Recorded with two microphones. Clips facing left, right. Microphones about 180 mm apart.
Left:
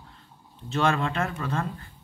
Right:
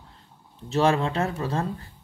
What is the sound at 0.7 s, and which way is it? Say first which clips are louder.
Speech: right 3 dB; 25° right (ahead or behind).